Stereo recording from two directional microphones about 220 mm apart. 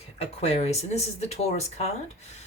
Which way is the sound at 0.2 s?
30° left (ahead or behind).